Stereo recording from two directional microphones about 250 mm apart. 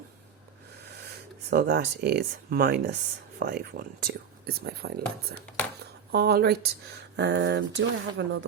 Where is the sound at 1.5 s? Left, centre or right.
Right.